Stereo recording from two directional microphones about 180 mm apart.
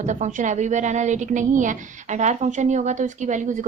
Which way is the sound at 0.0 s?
45° right (ahead or behind).